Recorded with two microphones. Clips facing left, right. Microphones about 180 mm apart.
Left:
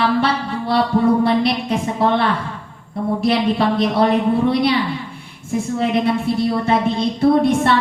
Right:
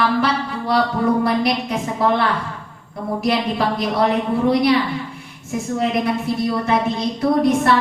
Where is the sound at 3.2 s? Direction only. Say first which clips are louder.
Left 2 dB; 25° left (ahead or behind).